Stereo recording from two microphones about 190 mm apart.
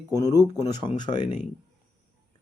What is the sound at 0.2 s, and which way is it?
A man's voice, 20° left (ahead or behind).